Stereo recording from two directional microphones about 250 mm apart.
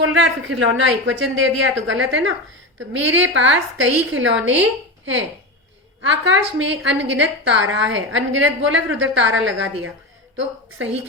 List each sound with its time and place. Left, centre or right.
0.0 s a woman's voice: right